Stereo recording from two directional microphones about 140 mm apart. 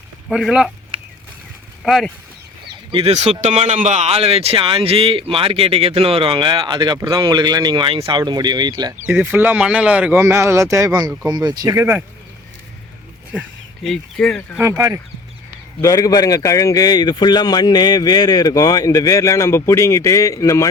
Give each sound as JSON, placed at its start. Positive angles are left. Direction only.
{"t": 0.3, "sound": "speech", "side_deg": -5}
{"t": 1.8, "sound": "speech", "side_deg": 0}
{"t": 2.9, "sound": "speech", "side_deg": -45}
{"t": 9.0, "sound": "speech", "side_deg": -15}
{"t": 13.8, "sound": "speech", "side_deg": 5}
{"t": 14.6, "sound": "speech", "side_deg": -15}
{"t": 15.8, "sound": "a man's voice", "side_deg": 25}